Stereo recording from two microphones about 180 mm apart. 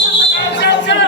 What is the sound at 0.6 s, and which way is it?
Basketball bounce, 75° left (ahead or behind).